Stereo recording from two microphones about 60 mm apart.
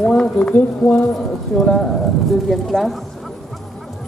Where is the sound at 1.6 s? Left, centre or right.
Centre.